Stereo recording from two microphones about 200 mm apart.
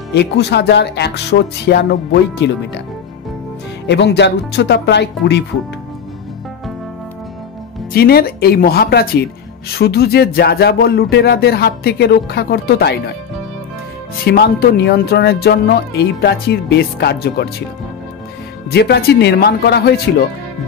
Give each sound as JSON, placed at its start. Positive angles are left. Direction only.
{"t": 0.1, "sound": "speech", "side_deg": 55}
{"t": 3.8, "sound": "speech", "side_deg": 60}
{"t": 7.9, "sound": "speech", "side_deg": 50}
{"t": 14.2, "sound": "speech", "side_deg": 55}
{"t": 18.7, "sound": "speech", "side_deg": 55}